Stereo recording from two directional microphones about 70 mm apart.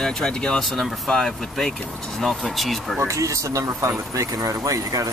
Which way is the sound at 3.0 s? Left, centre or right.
Right.